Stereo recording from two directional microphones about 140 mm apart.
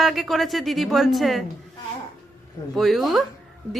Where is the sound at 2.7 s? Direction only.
Centre (ahead or behind).